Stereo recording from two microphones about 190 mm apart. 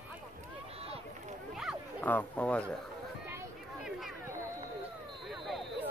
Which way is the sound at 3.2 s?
10° right (ahead or behind).